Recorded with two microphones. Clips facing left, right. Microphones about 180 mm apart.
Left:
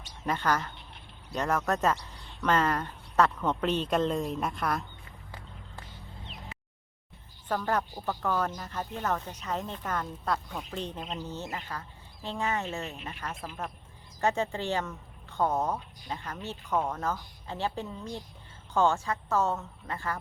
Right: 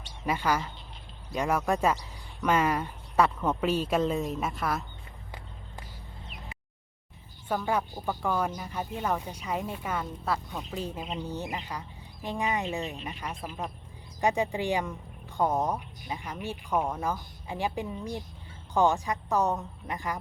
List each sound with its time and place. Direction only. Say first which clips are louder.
0.3 s speech: right 1 dB; 10° right (ahead or behind)
7.4 s speech: right 1 dB; 10° right (ahead or behind)